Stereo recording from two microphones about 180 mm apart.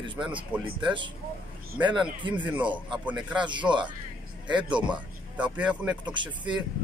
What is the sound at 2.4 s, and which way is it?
Speech, 10° right (ahead or behind).